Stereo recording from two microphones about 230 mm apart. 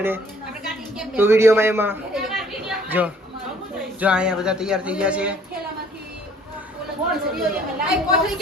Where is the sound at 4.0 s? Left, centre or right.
Centre.